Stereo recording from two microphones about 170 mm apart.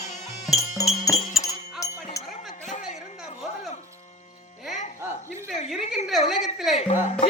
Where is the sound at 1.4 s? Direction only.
5° right (ahead or behind).